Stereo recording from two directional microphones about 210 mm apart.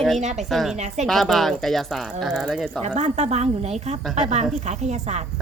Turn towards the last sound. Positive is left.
turn(degrees=-30)  # may be behind; listen again after turning